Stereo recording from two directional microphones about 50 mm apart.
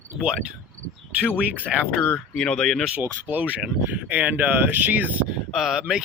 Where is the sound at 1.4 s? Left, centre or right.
Right.